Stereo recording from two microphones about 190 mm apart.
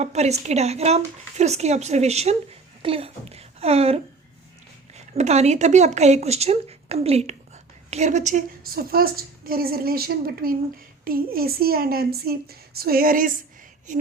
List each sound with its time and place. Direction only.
0.0 s speech: 35° right (ahead or behind)
5.1 s a woman's voice: 35° right (ahead or behind)